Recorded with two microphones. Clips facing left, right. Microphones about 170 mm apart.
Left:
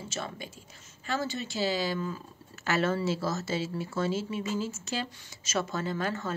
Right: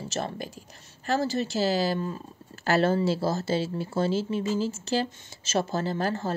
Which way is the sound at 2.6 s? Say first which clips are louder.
Right 5 dB; 35° right (ahead or behind).